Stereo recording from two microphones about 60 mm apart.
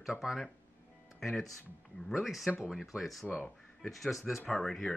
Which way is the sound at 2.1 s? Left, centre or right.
Centre.